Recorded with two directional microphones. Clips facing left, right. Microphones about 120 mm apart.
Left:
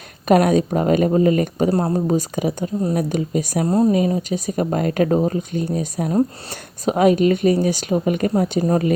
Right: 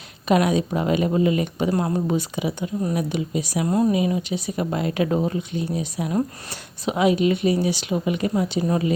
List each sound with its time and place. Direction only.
0.3 s speech: 45° left (ahead or behind)